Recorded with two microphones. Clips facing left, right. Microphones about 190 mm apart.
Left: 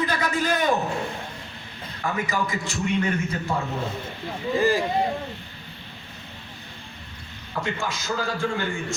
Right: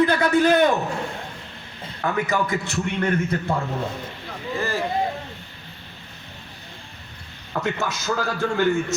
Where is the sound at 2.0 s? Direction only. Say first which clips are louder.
Right 3 dB; 60° right (ahead or behind).